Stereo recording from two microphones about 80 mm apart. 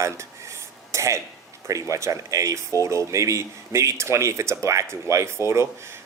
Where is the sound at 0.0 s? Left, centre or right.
Right.